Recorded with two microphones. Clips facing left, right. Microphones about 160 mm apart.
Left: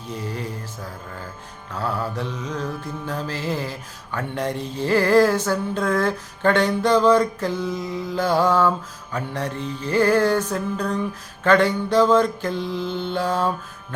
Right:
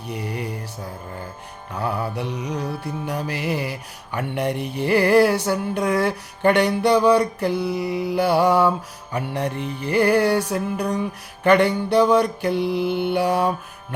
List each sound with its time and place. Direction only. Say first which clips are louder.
0.1 s mantra: right 1 dB; 15° right (ahead or behind)
1.7 s mantra: right 1 dB; 15° right (ahead or behind)